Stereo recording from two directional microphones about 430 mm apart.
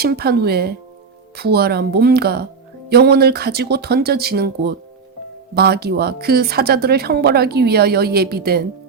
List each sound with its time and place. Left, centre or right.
0.0 s speech: right